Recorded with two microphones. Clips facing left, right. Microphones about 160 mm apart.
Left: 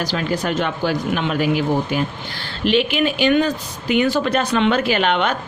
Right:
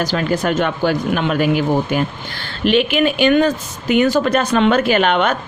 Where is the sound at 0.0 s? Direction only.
50° right (ahead or behind).